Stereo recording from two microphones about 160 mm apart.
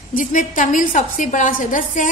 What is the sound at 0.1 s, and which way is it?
A woman's voice, 55° left (ahead or behind).